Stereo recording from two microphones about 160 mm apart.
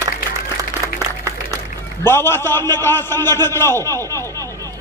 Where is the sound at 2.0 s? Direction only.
15° left (ahead or behind).